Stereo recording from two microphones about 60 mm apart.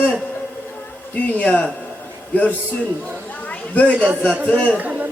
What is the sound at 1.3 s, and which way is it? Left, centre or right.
Speech, left.